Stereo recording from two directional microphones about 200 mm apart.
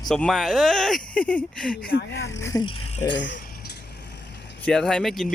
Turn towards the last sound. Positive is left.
turn(degrees=0)  # may be behind; listen again after turning